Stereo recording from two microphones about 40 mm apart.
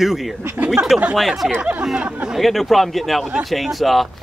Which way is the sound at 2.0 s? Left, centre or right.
Right.